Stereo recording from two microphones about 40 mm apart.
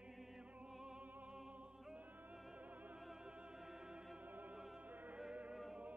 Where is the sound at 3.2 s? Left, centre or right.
Right.